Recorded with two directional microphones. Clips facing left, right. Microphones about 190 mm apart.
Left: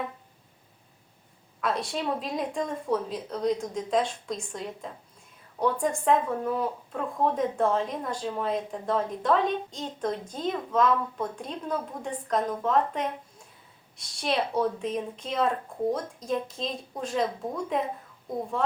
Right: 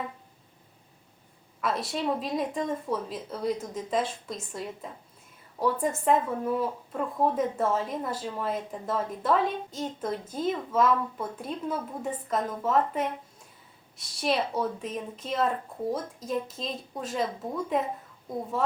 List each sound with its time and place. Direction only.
1.6 s speech: centre (ahead or behind)